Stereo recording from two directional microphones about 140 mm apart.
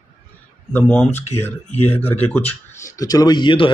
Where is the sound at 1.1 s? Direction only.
50° left (ahead or behind).